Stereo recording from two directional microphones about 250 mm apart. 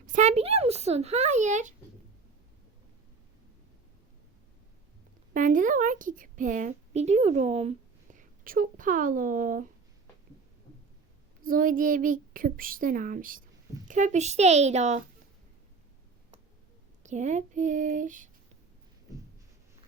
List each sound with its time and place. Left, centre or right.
0.0 s a sound: right
5.3 s a woman's voice: right
11.4 s a woman's voice: right
17.0 s speech: right